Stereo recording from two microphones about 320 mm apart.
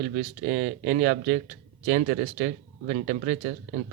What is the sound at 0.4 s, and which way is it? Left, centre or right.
Speech, right.